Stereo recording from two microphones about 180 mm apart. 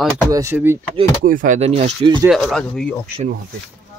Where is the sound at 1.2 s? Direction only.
50° right (ahead or behind).